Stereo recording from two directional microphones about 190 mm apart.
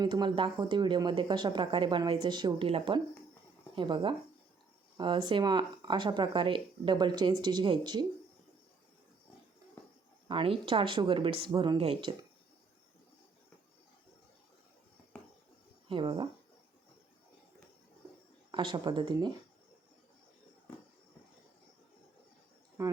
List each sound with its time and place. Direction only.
0.0 s speech: 25° right (ahead or behind)
10.2 s speech: 30° right (ahead or behind)
15.9 s speech: 25° right (ahead or behind)
18.5 s speech: 25° right (ahead or behind)
22.8 s speech: 15° right (ahead or behind)